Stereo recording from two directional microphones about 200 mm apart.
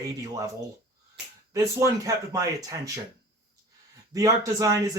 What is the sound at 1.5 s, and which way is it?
Speech, 15° right (ahead or behind).